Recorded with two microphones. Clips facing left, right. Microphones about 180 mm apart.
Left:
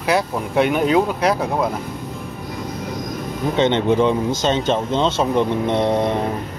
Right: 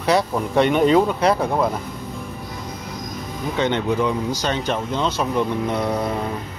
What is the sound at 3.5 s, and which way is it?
Speech, 25° left (ahead or behind).